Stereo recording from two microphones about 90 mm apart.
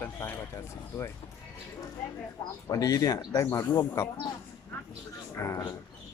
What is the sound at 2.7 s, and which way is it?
Speech, 40° left (ahead or behind).